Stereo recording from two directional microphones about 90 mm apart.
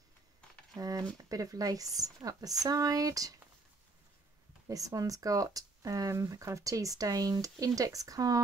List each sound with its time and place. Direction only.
0.7 s speech: 40° right (ahead or behind)
4.6 s speech: 40° right (ahead or behind)